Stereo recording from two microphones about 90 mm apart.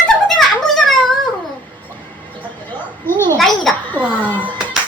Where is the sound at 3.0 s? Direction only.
25° left (ahead or behind).